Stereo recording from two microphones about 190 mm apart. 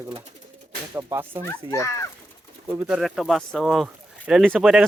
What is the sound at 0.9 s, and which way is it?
Speech, 10° right (ahead or behind).